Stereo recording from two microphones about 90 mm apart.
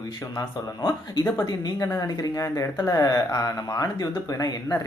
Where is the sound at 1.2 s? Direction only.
40° left (ahead or behind).